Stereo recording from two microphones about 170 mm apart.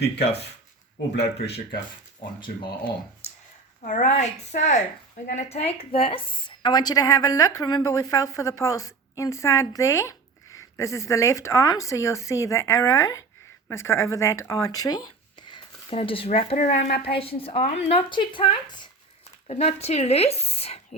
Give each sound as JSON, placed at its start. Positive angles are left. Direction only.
{"t": 1.1, "sound": "speech", "side_deg": 80}
{"t": 3.8, "sound": "a woman's voice", "side_deg": 50}